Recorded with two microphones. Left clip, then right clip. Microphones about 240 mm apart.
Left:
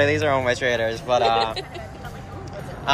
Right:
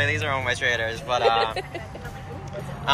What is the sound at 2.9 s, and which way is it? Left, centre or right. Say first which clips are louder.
Speech: left 1 dB; centre.